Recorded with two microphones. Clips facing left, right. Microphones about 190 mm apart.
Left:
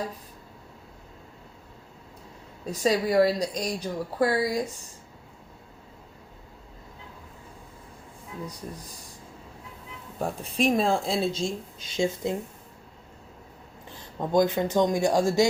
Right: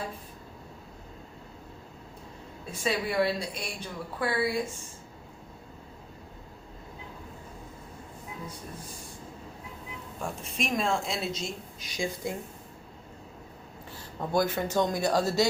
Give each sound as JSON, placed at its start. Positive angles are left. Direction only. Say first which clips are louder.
{"t": 2.6, "sound": "a woman's voice", "louder": "left 6 dB", "side_deg": 40}
{"t": 10.2, "sound": "a woman's voice", "louder": "left 7 dB", "side_deg": 35}
{"t": 13.9, "sound": "speech", "louder": "left 4 dB", "side_deg": 20}